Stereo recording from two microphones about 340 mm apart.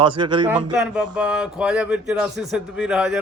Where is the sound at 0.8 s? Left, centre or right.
Centre.